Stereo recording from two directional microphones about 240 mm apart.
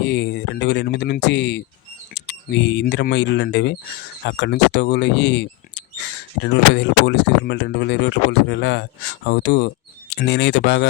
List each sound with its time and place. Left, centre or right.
0.0 s speech: left